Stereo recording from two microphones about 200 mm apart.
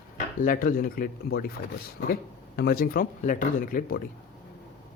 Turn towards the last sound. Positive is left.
turn(degrees=45)  # may be behind; listen again after turning